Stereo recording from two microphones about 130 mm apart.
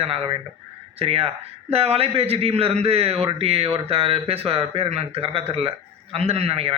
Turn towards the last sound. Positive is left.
turn(degrees=-50)  # may be behind; listen again after turning